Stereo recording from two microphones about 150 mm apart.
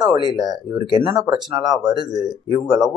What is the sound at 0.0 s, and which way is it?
Speech, 30° right (ahead or behind).